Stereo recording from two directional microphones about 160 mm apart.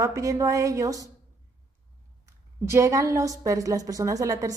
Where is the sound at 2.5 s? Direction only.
15° right (ahead or behind).